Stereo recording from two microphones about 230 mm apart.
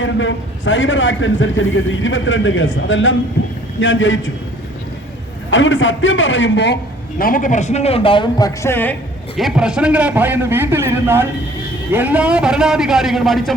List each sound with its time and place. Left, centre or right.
0.0 s a man's voice: left
5.5 s a man's voice: left
7.2 s speech: left; by 9.0 s centre
9.4 s a man's voice: centre